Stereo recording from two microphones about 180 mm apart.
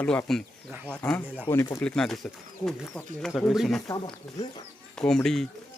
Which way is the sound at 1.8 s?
5° left (ahead or behind).